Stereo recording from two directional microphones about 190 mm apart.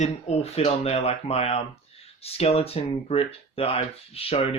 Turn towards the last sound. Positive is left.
turn(degrees=30)  # may be behind; listen again after turning